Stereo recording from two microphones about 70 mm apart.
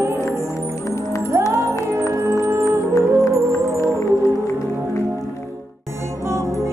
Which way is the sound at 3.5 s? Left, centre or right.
Left.